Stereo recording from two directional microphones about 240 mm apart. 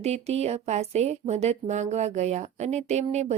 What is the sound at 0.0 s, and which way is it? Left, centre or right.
Speech, right.